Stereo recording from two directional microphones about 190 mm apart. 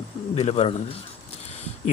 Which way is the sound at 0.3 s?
35° left (ahead or behind).